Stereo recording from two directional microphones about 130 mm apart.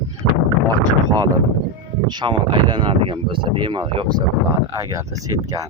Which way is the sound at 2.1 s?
35° right (ahead or behind).